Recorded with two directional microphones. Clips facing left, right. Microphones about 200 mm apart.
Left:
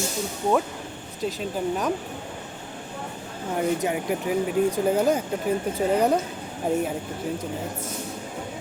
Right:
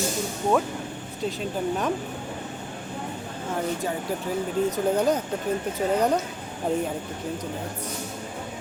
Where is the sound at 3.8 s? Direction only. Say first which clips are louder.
Left 3 dB; 15° left (ahead or behind).